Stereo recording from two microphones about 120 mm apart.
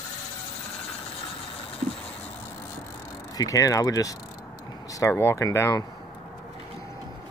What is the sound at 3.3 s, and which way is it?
Speech, 30° left (ahead or behind).